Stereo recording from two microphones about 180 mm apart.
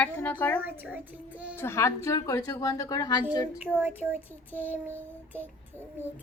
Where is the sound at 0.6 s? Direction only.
10° right (ahead or behind).